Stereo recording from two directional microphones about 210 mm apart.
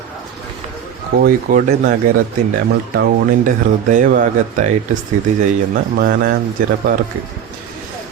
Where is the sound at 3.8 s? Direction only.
40° right (ahead or behind).